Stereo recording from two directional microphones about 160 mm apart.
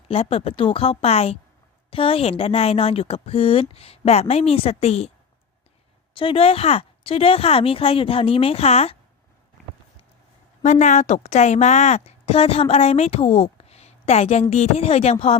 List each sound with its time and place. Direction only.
0.1 s speech: 35° left (ahead or behind)
6.1 s speech: 35° left (ahead or behind)
10.6 s a woman's voice: 50° left (ahead or behind)